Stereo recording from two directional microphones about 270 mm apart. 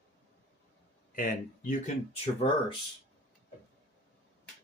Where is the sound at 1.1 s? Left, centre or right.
Left.